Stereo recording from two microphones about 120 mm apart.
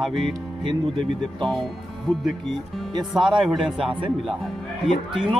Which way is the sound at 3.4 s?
Centre (ahead or behind).